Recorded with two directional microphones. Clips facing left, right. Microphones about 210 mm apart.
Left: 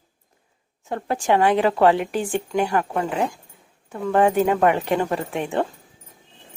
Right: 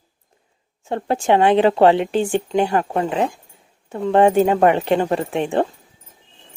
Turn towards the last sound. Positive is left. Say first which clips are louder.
# right 4 dB
turn(degrees=-25)  # may be behind; listen again after turning